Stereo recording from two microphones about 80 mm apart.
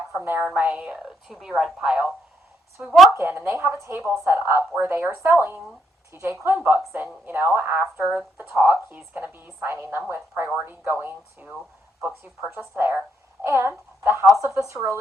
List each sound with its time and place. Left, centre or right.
0.2 s a woman's voice: right; by 2.1 s centre
3.1 s a woman's voice: right
6.6 s a woman's voice: centre; by 14.8 s right